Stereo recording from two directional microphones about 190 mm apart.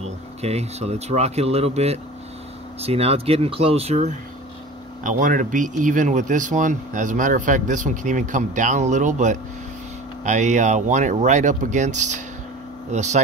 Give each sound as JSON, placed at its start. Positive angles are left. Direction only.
{"t": 0.0, "sound": "speech", "side_deg": -35}
{"t": 5.0, "sound": "speech", "side_deg": -45}